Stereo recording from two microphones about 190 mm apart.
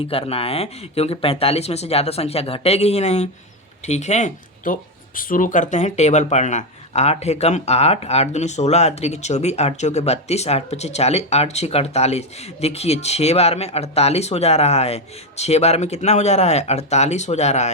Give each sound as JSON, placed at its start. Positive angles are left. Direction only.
{"t": 0.0, "sound": "speech", "side_deg": 30}